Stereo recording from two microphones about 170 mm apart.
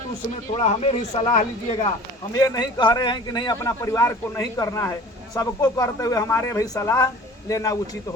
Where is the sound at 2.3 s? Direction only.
20° left (ahead or behind).